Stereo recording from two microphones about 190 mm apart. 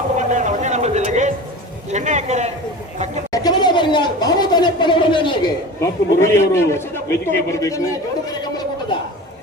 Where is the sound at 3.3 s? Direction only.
20° left (ahead or behind).